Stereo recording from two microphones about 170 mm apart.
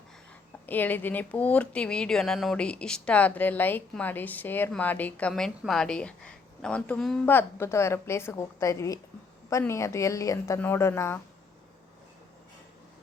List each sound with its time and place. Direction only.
0.7 s speech: 10° left (ahead or behind)